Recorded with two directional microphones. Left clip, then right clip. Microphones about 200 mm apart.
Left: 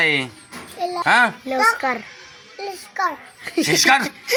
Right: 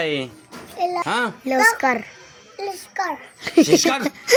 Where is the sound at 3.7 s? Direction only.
20° left (ahead or behind).